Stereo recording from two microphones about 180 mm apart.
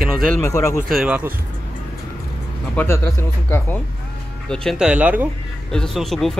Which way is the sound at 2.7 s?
15° left (ahead or behind).